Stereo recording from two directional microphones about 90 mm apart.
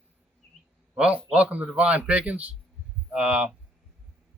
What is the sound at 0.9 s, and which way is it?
A man's voice, 15° right (ahead or behind).